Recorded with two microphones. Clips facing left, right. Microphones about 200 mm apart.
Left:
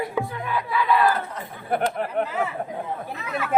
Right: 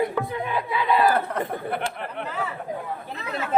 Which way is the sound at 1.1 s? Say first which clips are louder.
Right 6 dB; 60° right (ahead or behind).